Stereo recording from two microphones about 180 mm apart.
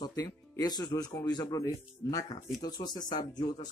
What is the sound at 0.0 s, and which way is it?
Speech, 20° left (ahead or behind).